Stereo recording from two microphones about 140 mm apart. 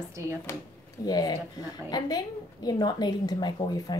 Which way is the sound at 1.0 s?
30° left (ahead or behind).